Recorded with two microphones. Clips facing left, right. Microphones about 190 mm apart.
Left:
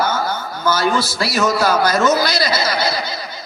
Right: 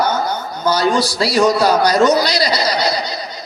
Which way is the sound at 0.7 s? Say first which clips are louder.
Right 3 dB; 20° right (ahead or behind).